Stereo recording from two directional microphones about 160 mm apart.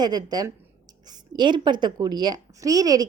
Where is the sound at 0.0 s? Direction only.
25° right (ahead or behind).